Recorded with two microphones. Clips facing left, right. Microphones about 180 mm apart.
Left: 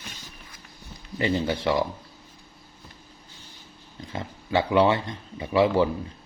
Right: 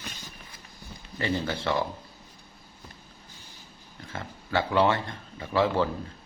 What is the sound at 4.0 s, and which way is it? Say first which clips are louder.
Speech: left 4 dB; 20° left (ahead or behind).